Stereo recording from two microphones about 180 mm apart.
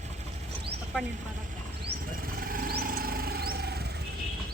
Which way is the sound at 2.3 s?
55° right (ahead or behind).